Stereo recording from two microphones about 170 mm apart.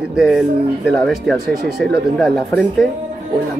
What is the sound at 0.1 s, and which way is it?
Speech, centre (ahead or behind).